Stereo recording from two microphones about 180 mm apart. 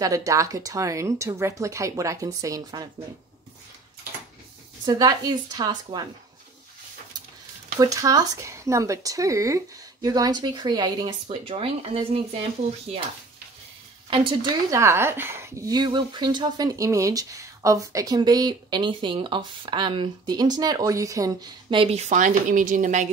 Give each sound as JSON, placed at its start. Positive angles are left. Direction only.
{"t": 0.0, "sound": "speech", "side_deg": -20}
{"t": 4.8, "sound": "speech", "side_deg": -20}
{"t": 7.8, "sound": "speech", "side_deg": -20}
{"t": 14.1, "sound": "speech", "side_deg": -30}
{"t": 14.7, "sound": "speech", "side_deg": -15}